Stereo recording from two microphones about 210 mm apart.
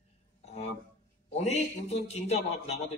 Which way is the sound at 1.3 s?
30° left (ahead or behind).